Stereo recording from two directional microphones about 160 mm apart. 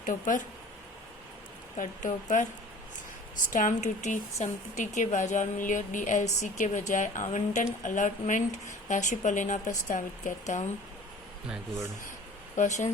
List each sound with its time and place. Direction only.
0.0 s speech: 55° left (ahead or behind)
1.8 s a woman's voice: 55° left (ahead or behind)
3.5 s a woman's voice: 55° left (ahead or behind)
12.5 s speech: 50° left (ahead or behind)